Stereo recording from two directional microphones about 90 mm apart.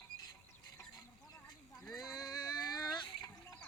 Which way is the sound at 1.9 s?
45° left (ahead or behind).